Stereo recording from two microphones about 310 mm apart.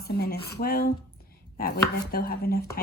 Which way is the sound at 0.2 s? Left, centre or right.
Left.